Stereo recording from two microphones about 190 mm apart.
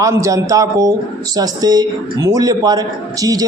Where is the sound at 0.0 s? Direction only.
15° right (ahead or behind).